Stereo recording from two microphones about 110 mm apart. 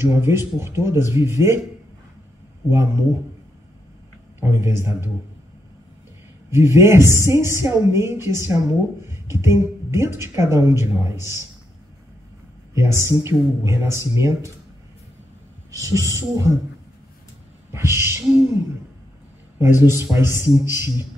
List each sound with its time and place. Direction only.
0.0 s a woman's voice: 20° right (ahead or behind)
2.7 s a woman's voice: 25° right (ahead or behind)
4.4 s a woman's voice: 25° right (ahead or behind)
6.5 s a woman's voice: 25° right (ahead or behind)
12.7 s a woman's voice: 25° right (ahead or behind)
15.7 s a woman's voice: 30° right (ahead or behind)
17.7 s a woman's voice: 25° right (ahead or behind)
19.6 s a woman's voice: 25° right (ahead or behind)